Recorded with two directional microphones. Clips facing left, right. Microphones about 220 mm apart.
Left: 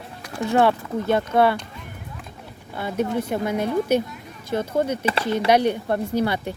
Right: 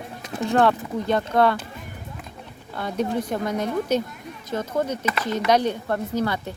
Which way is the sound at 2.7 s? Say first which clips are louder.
Left 1 dB; 5° left (ahead or behind).